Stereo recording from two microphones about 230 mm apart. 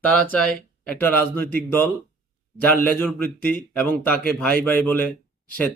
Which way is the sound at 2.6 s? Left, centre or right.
Centre.